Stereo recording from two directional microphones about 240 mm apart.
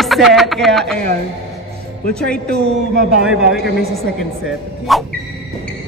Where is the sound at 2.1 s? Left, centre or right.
Centre.